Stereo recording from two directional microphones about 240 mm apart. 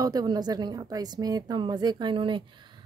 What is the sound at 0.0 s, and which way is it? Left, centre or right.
A woman's voice, centre.